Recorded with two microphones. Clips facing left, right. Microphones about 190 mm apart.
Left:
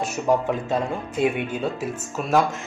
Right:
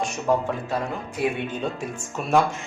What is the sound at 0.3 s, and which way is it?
Speech, 15° left (ahead or behind).